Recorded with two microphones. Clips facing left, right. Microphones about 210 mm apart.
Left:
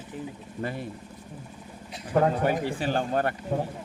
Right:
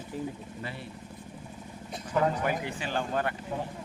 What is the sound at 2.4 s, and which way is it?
Speech, 35° left (ahead or behind).